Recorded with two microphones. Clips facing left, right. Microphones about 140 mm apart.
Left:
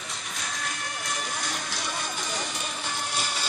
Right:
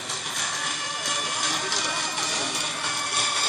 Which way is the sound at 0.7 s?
Centre (ahead or behind).